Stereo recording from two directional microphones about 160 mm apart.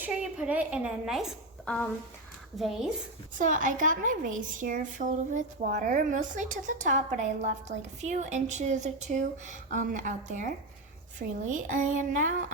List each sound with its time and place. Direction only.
0.0 s a woman's voice: 5° right (ahead or behind)
3.3 s a woman's voice: 55° right (ahead or behind)